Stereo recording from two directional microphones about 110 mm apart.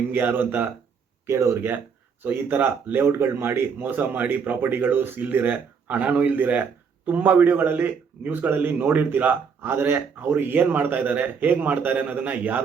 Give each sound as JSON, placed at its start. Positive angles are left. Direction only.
{"t": 0.1, "sound": "speech", "side_deg": -20}